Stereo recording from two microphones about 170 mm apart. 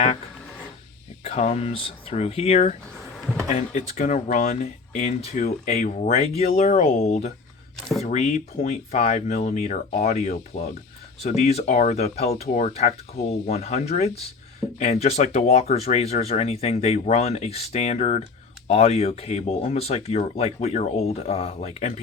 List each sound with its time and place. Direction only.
1.2 s speech: 40° left (ahead or behind)
7.8 s speech: centre (ahead or behind)
8.0 s speech: 40° left (ahead or behind)